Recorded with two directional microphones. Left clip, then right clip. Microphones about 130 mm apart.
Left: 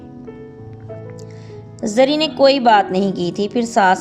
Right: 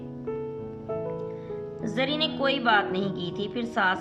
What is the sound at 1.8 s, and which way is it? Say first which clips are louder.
A woman's voice: left 13 dB; 45° left (ahead or behind).